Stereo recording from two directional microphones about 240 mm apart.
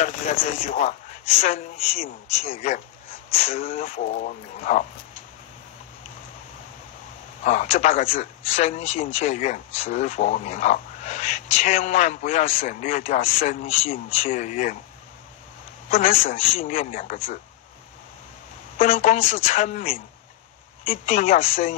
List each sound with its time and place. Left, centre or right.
0.0 s speech: left
2.4 s speech: left
7.4 s speech: left
15.9 s speech: left
18.8 s speech: left